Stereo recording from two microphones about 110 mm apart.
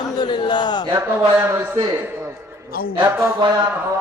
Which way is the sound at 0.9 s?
20° right (ahead or behind).